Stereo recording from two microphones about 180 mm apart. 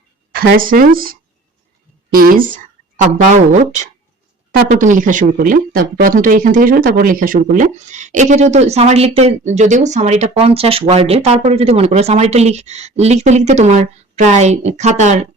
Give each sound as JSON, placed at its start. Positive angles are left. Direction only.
{"t": 0.3, "sound": "a woman's voice", "side_deg": -50}